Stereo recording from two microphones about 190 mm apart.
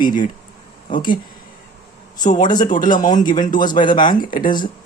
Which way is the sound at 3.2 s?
45° left (ahead or behind).